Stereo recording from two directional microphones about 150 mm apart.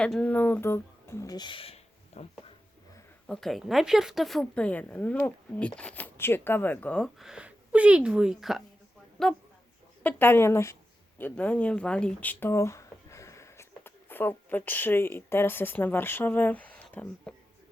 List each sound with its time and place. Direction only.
0.0 s speech: 5° left (ahead or behind); by 2.2 s 40° left (ahead or behind)
3.2 s a woman's voice: centre (ahead or behind)